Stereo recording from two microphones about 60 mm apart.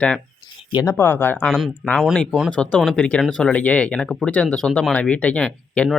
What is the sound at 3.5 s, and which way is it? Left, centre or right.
Speech, left.